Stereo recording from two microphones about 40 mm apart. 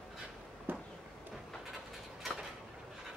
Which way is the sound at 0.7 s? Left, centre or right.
Right.